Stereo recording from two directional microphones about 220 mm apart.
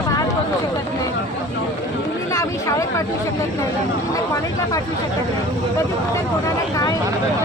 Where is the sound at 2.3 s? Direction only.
15° left (ahead or behind).